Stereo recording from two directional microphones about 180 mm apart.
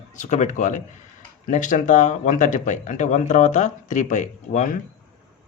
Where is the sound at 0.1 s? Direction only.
45° left (ahead or behind).